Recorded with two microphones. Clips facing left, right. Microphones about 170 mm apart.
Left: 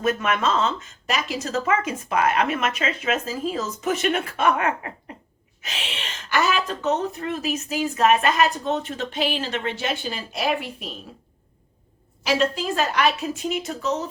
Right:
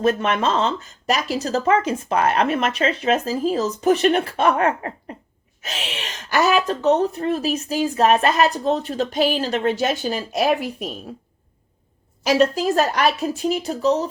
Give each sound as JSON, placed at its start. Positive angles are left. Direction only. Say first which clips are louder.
{"t": 0.0, "sound": "speech", "louder": "right 3 dB", "side_deg": -30}
{"t": 12.2, "sound": "speech", "louder": "right 5 dB", "side_deg": -40}